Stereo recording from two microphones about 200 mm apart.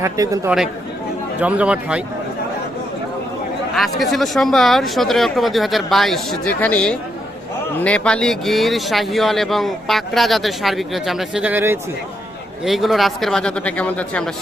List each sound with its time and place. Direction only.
0.0 s a man's voice: 15° right (ahead or behind)
3.8 s speech: centre (ahead or behind)